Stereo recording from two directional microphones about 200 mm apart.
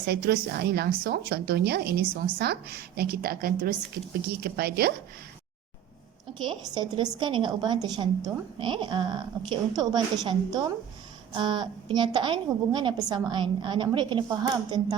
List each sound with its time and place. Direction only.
0.0 s a woman's voice: 50° right (ahead or behind)
6.4 s a woman's voice: 25° right (ahead or behind)